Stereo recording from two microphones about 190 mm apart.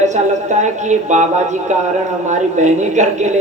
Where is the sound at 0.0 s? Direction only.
40° right (ahead or behind).